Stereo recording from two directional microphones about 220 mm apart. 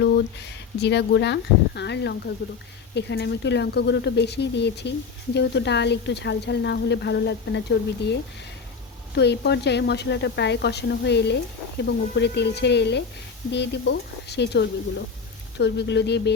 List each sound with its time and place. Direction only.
0.0 s speech: 50° left (ahead or behind)